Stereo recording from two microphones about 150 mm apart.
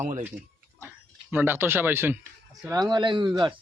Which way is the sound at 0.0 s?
55° right (ahead or behind).